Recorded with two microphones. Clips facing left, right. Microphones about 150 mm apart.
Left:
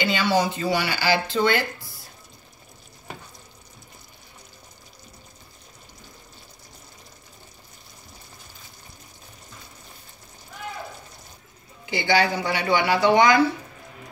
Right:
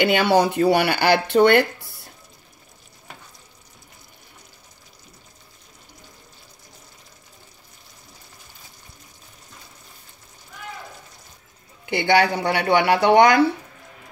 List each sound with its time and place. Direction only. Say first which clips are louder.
0.0 s speech: right 5 dB; 60° right (ahead or behind)
11.8 s speech: right 3 dB; 60° right (ahead or behind)